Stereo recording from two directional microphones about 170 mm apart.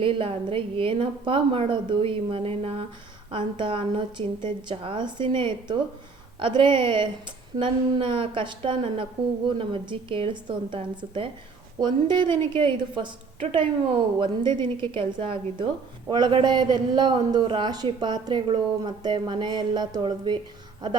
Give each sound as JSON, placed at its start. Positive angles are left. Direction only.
{"t": 0.0, "sound": "a woman's voice", "side_deg": -30}